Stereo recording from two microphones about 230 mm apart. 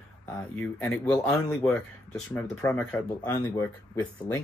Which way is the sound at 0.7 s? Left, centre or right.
Centre.